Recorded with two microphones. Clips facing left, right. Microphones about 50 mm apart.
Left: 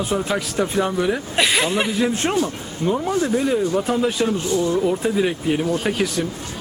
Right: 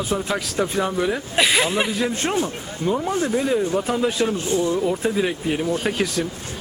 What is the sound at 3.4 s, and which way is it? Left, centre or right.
Speech, centre.